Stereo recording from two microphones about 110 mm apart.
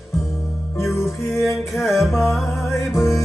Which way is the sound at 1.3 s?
Centre (ahead or behind).